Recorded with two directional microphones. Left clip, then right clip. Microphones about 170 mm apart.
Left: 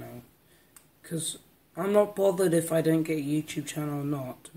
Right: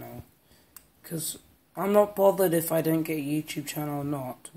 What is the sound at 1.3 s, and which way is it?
A man's voice, 15° left (ahead or behind).